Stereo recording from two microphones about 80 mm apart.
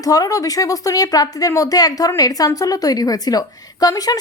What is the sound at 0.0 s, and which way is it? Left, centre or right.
A woman's voice, left.